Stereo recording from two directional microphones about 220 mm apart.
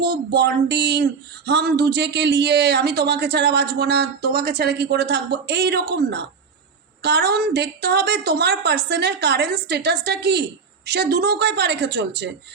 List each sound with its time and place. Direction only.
0.0 s speech: 50° right (ahead or behind)